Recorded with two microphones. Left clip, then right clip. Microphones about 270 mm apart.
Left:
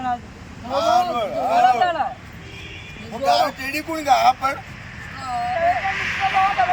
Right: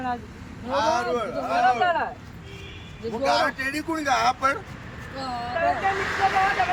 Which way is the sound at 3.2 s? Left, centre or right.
Centre.